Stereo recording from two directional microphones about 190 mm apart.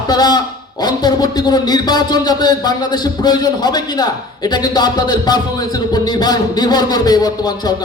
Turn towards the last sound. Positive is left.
turn(degrees=20)  # may be behind; listen again after turning